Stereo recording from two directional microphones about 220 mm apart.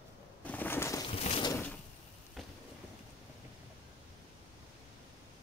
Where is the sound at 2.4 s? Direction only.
Centre (ahead or behind).